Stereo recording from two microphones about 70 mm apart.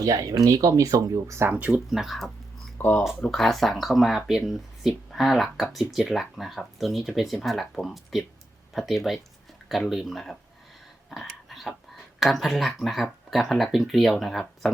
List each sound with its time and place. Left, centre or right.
0.0 s speech: right
1.5 s speech: right
1.9 s speech: centre
2.7 s speech: left
3.3 s speech: centre
11.1 s a sound: centre
12.2 s speech: centre